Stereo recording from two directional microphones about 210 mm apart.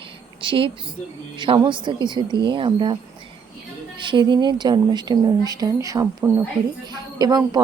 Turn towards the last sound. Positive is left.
turn(degrees=-20)  # may be behind; listen again after turning